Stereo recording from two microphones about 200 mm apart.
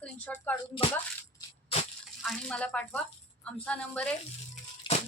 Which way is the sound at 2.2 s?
5° left (ahead or behind).